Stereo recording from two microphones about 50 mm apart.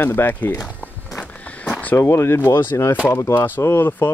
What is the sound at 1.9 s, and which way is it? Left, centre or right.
Speech, left.